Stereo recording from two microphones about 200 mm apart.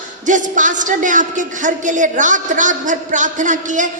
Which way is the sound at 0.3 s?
40° right (ahead or behind).